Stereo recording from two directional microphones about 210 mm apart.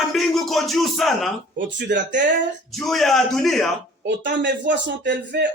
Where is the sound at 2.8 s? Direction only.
Centre (ahead or behind).